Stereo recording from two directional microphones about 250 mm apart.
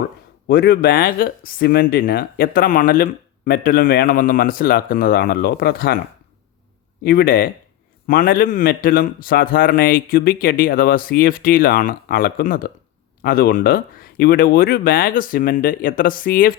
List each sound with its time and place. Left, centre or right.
0.4 s speech: left
7.0 s speech: left